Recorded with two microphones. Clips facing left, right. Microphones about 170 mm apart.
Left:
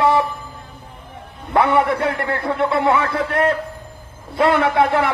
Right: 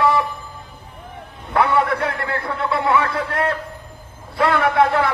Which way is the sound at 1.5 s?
25° left (ahead or behind).